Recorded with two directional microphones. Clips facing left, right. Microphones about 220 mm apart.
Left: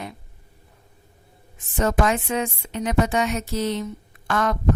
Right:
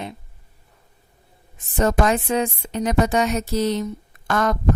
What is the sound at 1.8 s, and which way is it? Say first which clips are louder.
A woman's voice: right 2 dB; 35° right (ahead or behind).